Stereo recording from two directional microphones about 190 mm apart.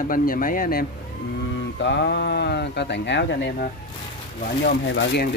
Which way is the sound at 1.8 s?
65° left (ahead or behind).